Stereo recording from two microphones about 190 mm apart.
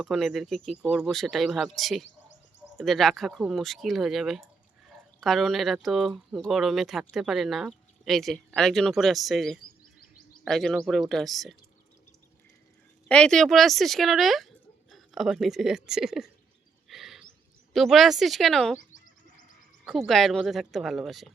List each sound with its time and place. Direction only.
0.0 s speech: centre (ahead or behind)
13.1 s speech: 5° left (ahead or behind)
16.9 s a sound: centre (ahead or behind)
17.7 s speech: centre (ahead or behind)
18.8 s bird: 45° left (ahead or behind)
19.8 s speech: centre (ahead or behind)